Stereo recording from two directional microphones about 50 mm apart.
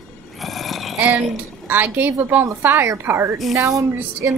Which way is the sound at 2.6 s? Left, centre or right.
Right.